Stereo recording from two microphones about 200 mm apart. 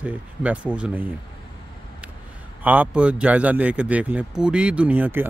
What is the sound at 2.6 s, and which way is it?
Speech, 5° right (ahead or behind).